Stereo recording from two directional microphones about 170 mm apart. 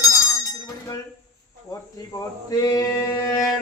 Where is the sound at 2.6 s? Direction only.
20° left (ahead or behind).